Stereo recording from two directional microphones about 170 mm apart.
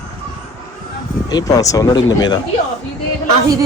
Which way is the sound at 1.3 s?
20° left (ahead or behind).